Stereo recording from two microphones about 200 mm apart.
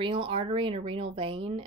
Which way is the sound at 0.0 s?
25° right (ahead or behind).